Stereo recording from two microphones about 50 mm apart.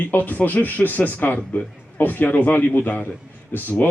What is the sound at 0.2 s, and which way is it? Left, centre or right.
A man's voice, left.